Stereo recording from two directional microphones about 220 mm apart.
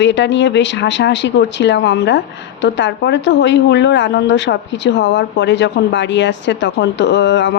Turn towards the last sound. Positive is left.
turn(degrees=50)  # may be behind; listen again after turning